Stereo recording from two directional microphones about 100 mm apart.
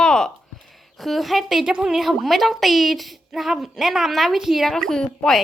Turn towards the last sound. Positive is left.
turn(degrees=5)  # may be behind; listen again after turning